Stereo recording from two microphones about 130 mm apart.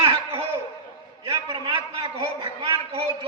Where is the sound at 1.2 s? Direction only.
45° right (ahead or behind).